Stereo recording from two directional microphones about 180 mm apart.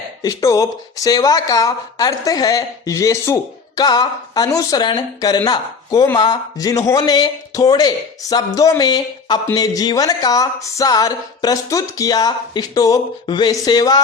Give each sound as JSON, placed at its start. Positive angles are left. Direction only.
{"t": 0.2, "sound": "speech", "side_deg": 20}